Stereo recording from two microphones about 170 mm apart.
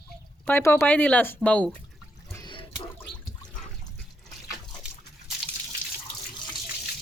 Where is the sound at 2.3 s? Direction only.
25° left (ahead or behind).